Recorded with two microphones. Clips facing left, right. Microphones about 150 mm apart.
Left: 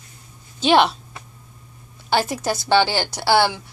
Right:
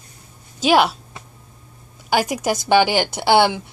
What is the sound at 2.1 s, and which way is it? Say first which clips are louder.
A woman's voice: right 2 dB; 15° right (ahead or behind).